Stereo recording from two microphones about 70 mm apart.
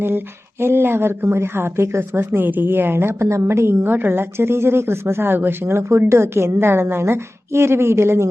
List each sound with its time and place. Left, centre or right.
0.6 s speech: right